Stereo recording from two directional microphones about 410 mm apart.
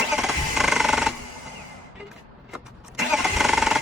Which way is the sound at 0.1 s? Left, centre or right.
Centre.